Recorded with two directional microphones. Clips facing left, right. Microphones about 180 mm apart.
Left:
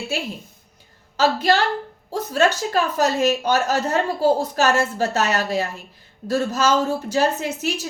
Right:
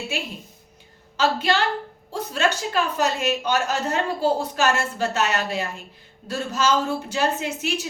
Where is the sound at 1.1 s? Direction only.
40° left (ahead or behind).